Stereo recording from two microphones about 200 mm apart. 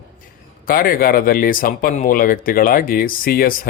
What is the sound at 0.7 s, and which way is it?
Speech, 45° left (ahead or behind).